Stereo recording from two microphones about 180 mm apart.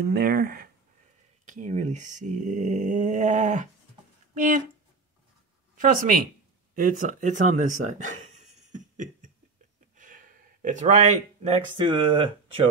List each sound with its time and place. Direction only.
0.0 s speech: 55° right (ahead or behind)
1.4 s speech: 45° right (ahead or behind)
5.8 s speech: 50° right (ahead or behind); by 12.6 s 30° right (ahead or behind)